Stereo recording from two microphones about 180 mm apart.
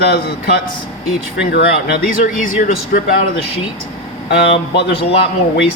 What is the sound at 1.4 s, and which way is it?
Speech, 65° left (ahead or behind).